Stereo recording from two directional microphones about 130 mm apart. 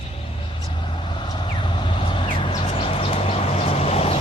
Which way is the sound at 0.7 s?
35° left (ahead or behind).